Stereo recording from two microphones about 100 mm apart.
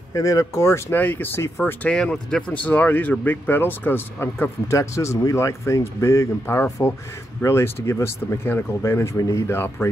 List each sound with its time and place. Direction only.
0.1 s speech: 35° left (ahead or behind)